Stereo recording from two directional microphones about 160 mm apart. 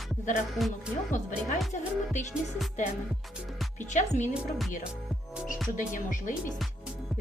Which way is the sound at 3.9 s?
50° left (ahead or behind).